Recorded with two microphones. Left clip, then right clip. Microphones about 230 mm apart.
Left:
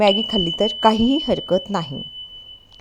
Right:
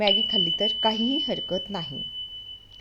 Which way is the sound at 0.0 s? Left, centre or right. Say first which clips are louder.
Left 4 dB; left.